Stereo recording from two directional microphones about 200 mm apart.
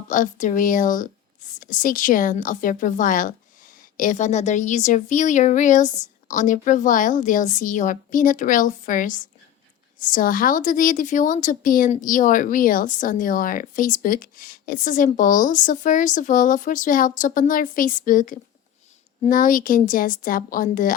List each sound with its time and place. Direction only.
0.1 s a woman's voice: 40° left (ahead or behind)